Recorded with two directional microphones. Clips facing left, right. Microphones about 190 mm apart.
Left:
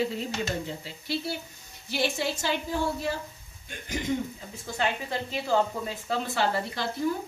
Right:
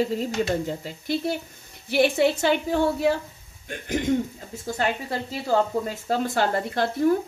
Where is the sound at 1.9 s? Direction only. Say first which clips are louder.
Right 9 dB; 60° right (ahead or behind).